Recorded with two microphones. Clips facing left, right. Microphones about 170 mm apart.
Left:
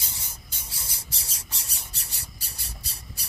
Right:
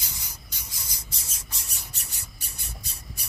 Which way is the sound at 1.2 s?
30° left (ahead or behind).